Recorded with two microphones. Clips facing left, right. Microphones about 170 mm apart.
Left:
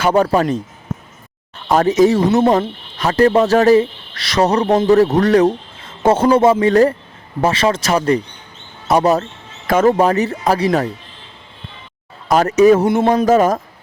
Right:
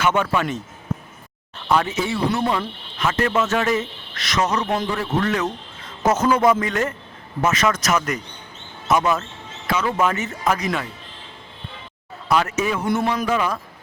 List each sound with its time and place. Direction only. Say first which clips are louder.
0.0 s speech: left 6 dB; 35° left (ahead or behind)
1.6 s speech: left 9 dB; 40° left (ahead or behind)
12.3 s speech: left 10 dB; 40° left (ahead or behind)